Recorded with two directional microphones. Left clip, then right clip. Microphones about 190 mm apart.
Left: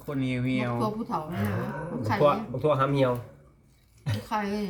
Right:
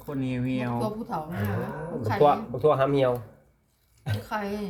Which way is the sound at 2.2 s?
40° right (ahead or behind).